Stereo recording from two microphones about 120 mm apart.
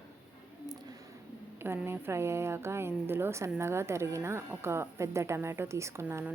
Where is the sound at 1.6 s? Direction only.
20° right (ahead or behind).